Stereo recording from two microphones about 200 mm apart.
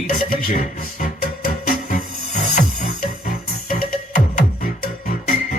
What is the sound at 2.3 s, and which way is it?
Music, 35° left (ahead or behind).